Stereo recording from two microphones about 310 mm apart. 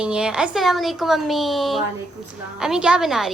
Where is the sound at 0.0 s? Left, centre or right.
Centre.